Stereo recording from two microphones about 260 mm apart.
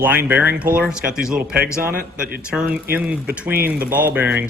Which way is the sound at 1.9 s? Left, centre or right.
Right.